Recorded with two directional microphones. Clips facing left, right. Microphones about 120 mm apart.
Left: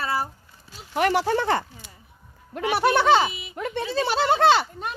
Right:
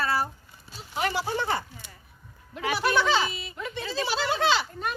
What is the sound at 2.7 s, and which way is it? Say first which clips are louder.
Speech: left 6 dB; 60° left (ahead or behind).